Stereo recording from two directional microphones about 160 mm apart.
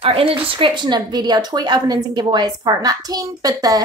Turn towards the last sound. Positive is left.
turn(degrees=-25)  # may be behind; listen again after turning